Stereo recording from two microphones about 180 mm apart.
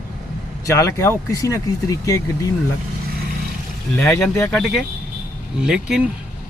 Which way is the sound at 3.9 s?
15° left (ahead or behind).